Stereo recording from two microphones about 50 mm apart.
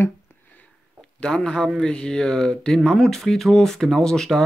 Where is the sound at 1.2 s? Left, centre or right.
Centre.